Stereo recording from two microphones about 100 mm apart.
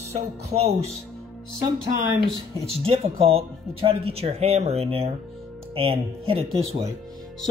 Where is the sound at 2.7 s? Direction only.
75° right (ahead or behind).